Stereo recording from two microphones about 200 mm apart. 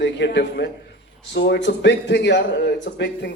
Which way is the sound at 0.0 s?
60° left (ahead or behind).